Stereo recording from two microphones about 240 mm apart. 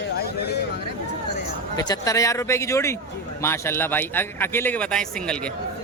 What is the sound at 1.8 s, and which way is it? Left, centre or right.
A man's voice, centre.